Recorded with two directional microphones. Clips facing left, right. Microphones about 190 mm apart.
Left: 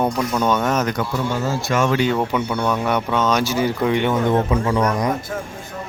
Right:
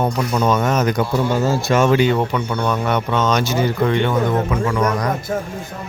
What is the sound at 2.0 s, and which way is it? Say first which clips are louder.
Speech: right 2 dB; centre (ahead or behind).